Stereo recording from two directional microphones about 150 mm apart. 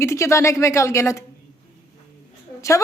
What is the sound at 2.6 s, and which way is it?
Speech, 20° left (ahead or behind).